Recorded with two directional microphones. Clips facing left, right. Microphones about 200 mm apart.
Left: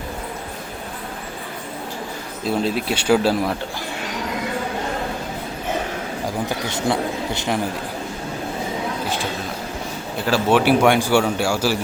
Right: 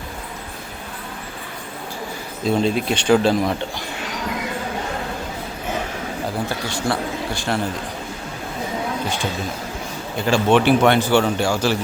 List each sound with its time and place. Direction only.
2.5 s speech: 5° left (ahead or behind)
6.2 s speech: 20° left (ahead or behind)
10.2 s speech: 5° left (ahead or behind)